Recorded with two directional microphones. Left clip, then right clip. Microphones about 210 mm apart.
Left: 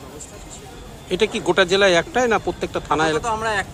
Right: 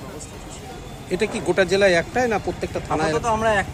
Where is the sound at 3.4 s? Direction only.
10° left (ahead or behind).